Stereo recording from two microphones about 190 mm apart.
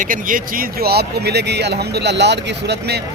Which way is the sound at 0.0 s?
45° right (ahead or behind).